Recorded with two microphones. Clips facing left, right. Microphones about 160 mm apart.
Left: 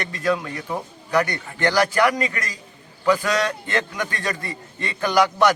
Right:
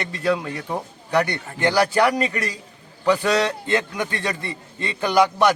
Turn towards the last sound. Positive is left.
turn(degrees=-15)  # may be behind; listen again after turning